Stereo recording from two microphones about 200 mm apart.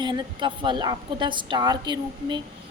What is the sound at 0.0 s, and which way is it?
A woman's voice, 20° right (ahead or behind).